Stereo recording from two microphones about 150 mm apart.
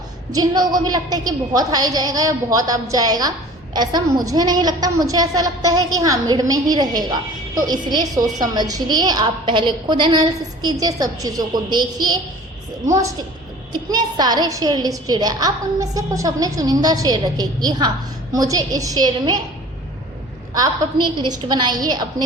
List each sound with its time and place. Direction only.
0.3 s a woman's voice: 25° right (ahead or behind)
20.5 s a woman's voice: 30° right (ahead or behind)